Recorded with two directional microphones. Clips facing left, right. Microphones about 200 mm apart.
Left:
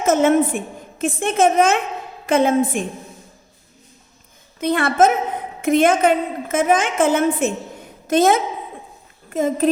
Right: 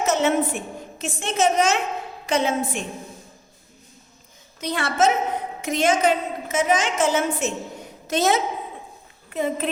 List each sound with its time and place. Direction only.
0.0 s a woman's voice: 50° left (ahead or behind)
4.6 s a woman's voice: 55° left (ahead or behind)